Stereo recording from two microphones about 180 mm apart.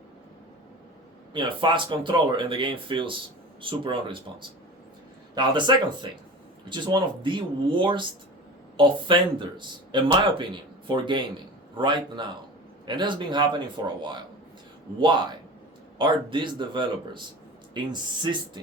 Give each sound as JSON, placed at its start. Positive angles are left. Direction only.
{"t": 1.3, "sound": "speech", "side_deg": -25}
{"t": 16.0, "sound": "speech", "side_deg": -25}